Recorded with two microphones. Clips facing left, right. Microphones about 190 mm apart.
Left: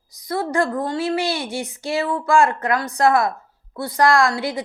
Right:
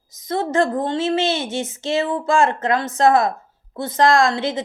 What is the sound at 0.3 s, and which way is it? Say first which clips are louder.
Speech: right 2 dB; 20° right (ahead or behind).